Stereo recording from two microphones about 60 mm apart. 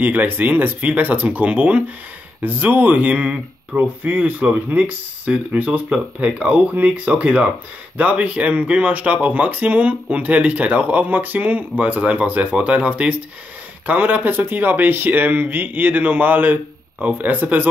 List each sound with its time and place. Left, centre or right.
0.0 s speech: right